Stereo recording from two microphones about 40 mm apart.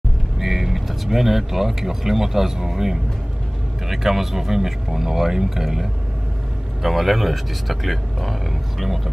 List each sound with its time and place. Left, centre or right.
0.4 s speech: centre